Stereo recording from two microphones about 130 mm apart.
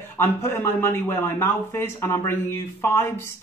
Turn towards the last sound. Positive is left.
turn(degrees=20)  # may be behind; listen again after turning